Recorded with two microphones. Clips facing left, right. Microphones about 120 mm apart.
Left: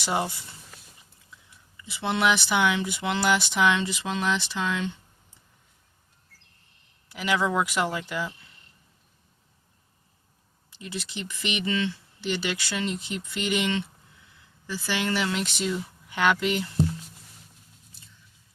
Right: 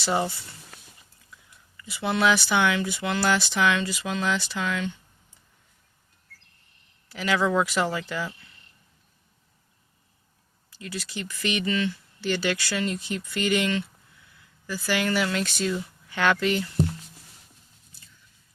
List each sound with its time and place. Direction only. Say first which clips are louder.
1.7 s speech: right 1 dB; 25° left (ahead or behind)
7.1 s speech: right 2 dB; 15° left (ahead or behind)
10.7 s speech: even; 20° left (ahead or behind)